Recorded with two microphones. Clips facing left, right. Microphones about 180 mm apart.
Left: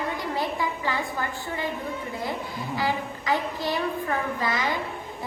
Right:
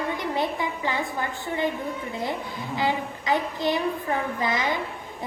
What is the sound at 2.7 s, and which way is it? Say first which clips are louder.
A child's voice: right 2 dB; 20° right (ahead or behind).